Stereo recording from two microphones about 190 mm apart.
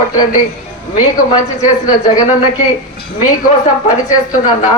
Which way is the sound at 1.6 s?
40° left (ahead or behind).